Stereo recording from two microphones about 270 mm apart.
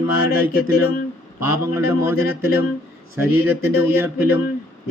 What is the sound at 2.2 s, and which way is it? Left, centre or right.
Speech, left.